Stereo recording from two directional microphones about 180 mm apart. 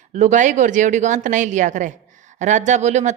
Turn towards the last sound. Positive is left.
turn(degrees=-40)  # may be behind; listen again after turning